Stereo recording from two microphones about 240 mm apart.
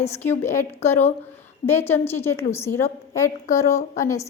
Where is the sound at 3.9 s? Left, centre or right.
Centre.